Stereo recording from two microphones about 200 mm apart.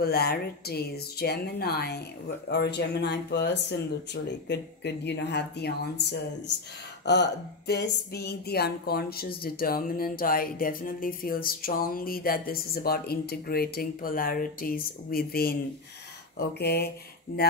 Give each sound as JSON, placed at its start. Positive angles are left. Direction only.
{"t": 0.0, "sound": "speech", "side_deg": 50}